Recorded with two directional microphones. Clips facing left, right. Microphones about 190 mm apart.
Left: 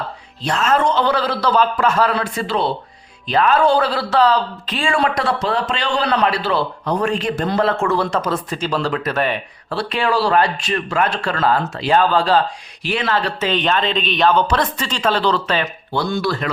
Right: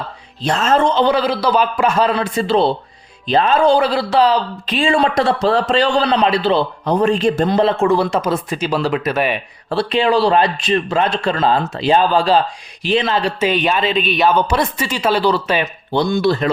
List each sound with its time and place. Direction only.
0.4 s a man's voice: 30° right (ahead or behind)
6.1 s a man's voice: 20° right (ahead or behind)
7.5 s a man's voice: 20° right (ahead or behind)
9.6 s a man's voice: 20° right (ahead or behind)
15.6 s a man's voice: 20° right (ahead or behind)